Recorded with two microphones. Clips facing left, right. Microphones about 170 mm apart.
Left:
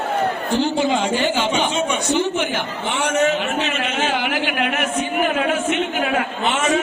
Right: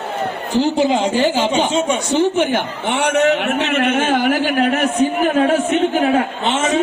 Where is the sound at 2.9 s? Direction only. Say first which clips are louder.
Right 4 dB; 65° right (ahead or behind); by 4.9 s 35° right (ahead or behind).